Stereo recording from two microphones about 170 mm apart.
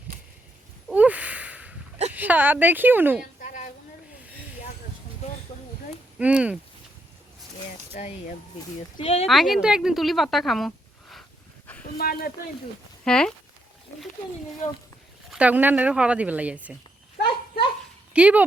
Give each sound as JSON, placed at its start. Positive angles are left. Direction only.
{"t": 0.9, "sound": "a sound", "side_deg": -10}
{"t": 2.1, "sound": "a woman's voice", "side_deg": -10}
{"t": 3.4, "sound": "a sound", "side_deg": 50}
{"t": 6.1, "sound": "a woman's voice", "side_deg": -5}
{"t": 7.9, "sound": "speech", "side_deg": 50}
{"t": 9.0, "sound": "speech", "side_deg": 35}
{"t": 9.2, "sound": "speech", "side_deg": 0}
{"t": 11.9, "sound": "speech", "side_deg": 60}
{"t": 13.1, "sound": "speech", "side_deg": 5}
{"t": 14.6, "sound": "speech", "side_deg": 45}
{"t": 15.3, "sound": "a woman's voice", "side_deg": -10}
{"t": 18.1, "sound": "speech", "side_deg": -10}